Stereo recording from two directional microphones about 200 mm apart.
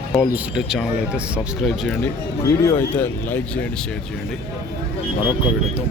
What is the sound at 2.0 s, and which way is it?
Speech, 15° left (ahead or behind).